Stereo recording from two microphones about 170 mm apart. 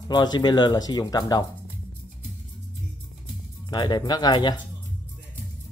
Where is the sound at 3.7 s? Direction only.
25° left (ahead or behind).